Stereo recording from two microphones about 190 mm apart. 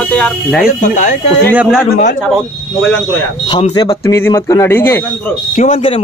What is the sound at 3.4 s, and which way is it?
Speech, 25° left (ahead or behind).